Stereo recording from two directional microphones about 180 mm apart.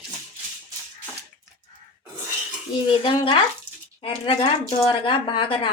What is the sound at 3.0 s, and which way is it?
Speech, 25° left (ahead or behind).